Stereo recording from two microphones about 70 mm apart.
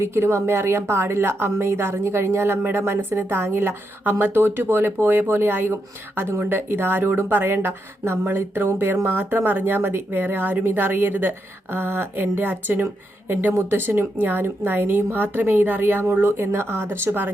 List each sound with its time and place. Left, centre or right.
0.0 s speech: right